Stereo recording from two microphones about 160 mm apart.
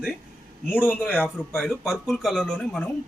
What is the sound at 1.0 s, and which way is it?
Speech, 5° right (ahead or behind).